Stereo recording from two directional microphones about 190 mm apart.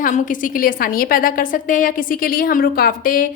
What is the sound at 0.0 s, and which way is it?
A woman's voice, 45° left (ahead or behind).